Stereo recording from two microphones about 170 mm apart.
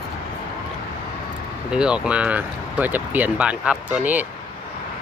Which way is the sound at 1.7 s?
5° right (ahead or behind).